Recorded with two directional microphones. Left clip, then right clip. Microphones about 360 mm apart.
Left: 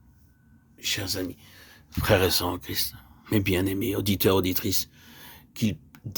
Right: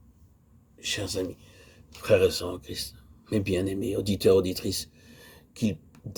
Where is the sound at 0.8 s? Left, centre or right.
Left.